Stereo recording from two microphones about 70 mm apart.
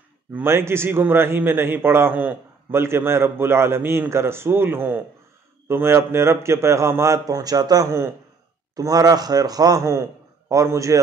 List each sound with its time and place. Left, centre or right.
0.3 s a man's voice: right
10.5 s a man's voice: right